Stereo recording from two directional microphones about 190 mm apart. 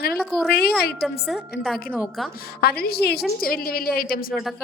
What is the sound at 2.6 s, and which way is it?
A woman's voice, 55° left (ahead or behind).